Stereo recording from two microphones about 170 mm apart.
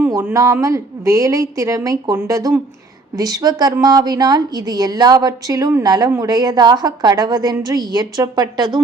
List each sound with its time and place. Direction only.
0.0 s a woman's voice: 15° right (ahead or behind)